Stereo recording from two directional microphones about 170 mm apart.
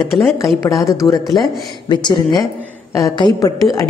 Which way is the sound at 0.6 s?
20° left (ahead or behind).